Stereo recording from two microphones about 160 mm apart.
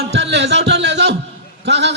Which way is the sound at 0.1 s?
90° right.